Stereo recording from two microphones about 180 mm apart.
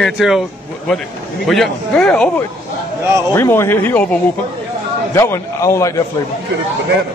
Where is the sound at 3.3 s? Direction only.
15° left (ahead or behind).